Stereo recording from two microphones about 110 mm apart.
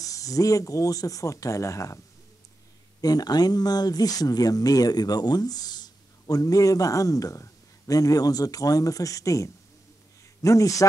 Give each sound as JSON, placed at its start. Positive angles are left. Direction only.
{"t": 0.0, "sound": "speech", "side_deg": 30}
{"t": 3.0, "sound": "speech", "side_deg": 35}